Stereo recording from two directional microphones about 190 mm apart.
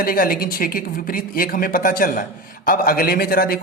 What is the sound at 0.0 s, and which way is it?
Speech, 50° left (ahead or behind).